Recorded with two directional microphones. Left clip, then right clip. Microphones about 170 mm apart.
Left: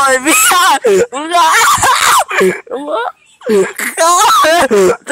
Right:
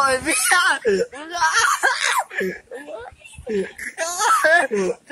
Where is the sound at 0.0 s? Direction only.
30° left (ahead or behind).